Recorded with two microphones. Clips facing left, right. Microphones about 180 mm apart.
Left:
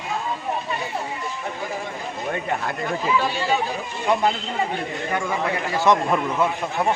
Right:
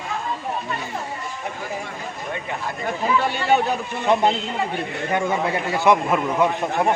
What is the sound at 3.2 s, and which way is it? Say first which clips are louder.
Speech: right 3 dB; 60° right (ahead or behind).